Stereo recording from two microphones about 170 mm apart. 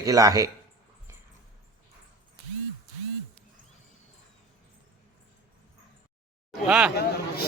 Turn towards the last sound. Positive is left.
turn(degrees=-5)  # may be behind; listen again after turning